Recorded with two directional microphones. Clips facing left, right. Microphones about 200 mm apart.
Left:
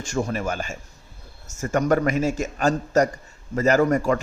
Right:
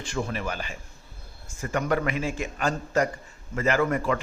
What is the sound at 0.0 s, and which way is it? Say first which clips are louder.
A man's voice: left 5 dB; 45° left (ahead or behind).